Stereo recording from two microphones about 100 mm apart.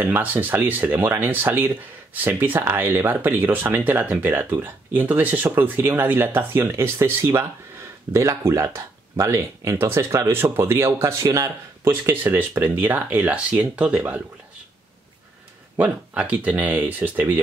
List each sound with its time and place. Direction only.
0.0 s speech: 15° right (ahead or behind); by 11.9 s 35° right (ahead or behind)
11.9 s speech: 20° right (ahead or behind)
15.7 s speech: 15° right (ahead or behind)